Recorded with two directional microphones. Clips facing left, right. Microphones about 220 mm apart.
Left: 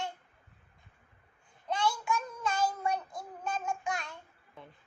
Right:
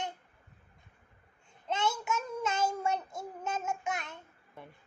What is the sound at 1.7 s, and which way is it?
Child singing, 25° right (ahead or behind).